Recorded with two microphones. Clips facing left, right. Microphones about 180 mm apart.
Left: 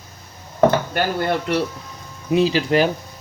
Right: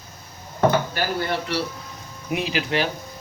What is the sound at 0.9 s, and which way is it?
Speech, 55° left (ahead or behind).